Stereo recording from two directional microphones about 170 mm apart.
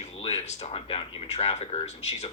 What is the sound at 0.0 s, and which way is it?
Speech, 40° left (ahead or behind).